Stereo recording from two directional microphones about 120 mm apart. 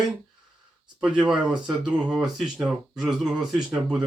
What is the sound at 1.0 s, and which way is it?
Speech, 10° right (ahead or behind).